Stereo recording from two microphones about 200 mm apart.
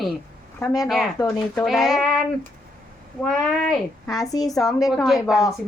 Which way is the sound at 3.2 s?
5° left (ahead or behind).